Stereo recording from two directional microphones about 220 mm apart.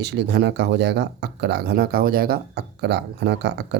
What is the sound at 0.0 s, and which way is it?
Speech, 50° right (ahead or behind).